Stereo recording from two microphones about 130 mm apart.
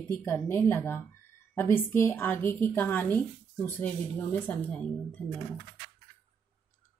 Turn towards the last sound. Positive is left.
turn(degrees=10)  # may be behind; listen again after turning